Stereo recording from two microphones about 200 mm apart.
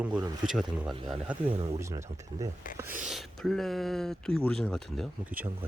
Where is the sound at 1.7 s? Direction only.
15° right (ahead or behind).